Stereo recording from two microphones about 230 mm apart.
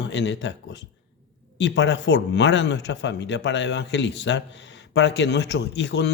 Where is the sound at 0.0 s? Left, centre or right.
Left.